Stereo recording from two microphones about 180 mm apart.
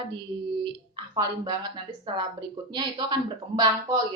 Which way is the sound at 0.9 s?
20° right (ahead or behind).